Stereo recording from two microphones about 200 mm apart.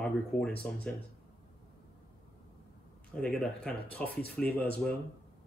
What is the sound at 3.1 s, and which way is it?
Speech, 5° left (ahead or behind).